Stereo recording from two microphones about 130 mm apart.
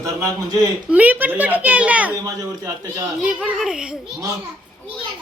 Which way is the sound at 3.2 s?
5° right (ahead or behind).